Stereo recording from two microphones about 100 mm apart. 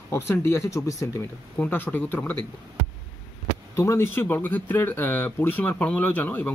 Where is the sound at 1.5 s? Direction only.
20° left (ahead or behind).